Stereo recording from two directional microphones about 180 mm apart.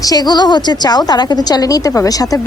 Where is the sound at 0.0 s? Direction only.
20° left (ahead or behind).